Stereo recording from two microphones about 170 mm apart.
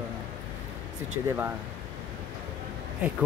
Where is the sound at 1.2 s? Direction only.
15° right (ahead or behind).